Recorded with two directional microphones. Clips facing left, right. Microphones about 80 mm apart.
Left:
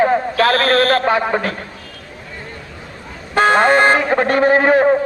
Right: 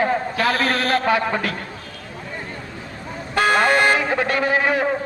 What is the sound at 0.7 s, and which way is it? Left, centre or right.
Speech, left.